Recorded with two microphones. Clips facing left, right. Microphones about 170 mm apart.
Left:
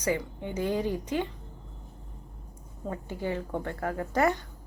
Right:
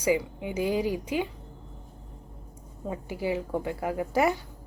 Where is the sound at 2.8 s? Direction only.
10° right (ahead or behind).